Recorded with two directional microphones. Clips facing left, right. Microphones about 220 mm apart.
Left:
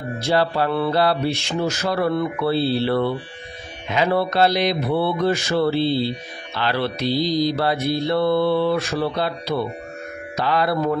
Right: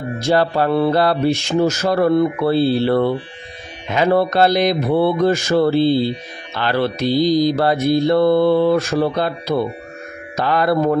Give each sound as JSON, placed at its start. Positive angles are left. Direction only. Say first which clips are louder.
{"t": 0.2, "sound": "mantra", "louder": "right 4 dB", "side_deg": -45}